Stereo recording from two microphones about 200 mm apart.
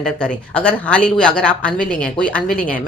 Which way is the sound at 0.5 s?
5° left (ahead or behind).